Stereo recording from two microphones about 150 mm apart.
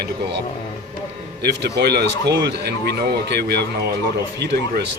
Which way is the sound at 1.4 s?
90° right.